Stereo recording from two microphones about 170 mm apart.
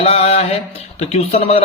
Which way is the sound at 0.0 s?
35° left (ahead or behind).